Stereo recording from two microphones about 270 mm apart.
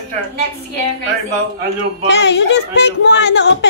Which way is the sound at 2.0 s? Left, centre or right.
Left.